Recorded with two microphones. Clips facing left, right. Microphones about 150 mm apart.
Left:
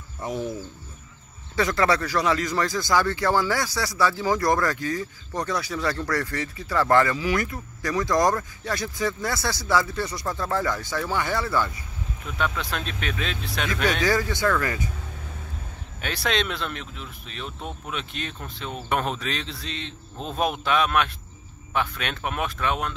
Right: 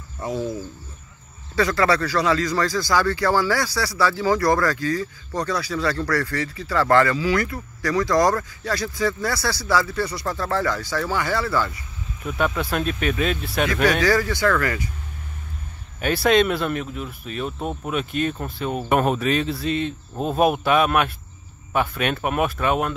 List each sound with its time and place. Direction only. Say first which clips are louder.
1.5 s speech: right 2 dB; 20° left (ahead or behind)
12.4 s speech: right 5 dB; 10° right (ahead or behind)
14.0 s speech: right 3 dB; 20° left (ahead or behind)
16.0 s speech: right 9 dB; 5° right (ahead or behind)
17.5 s speech: right 6 dB; 45° right (ahead or behind)
17.8 s speech: right 11 dB; 5° right (ahead or behind)
19.9 s speech: right 8 dB; 50° right (ahead or behind)
20.6 s speech: right 4 dB; 5° right (ahead or behind)